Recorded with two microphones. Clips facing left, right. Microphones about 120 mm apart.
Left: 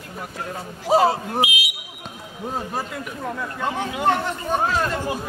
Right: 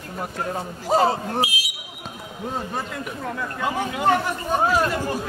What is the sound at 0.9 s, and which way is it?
Speech, centre (ahead or behind).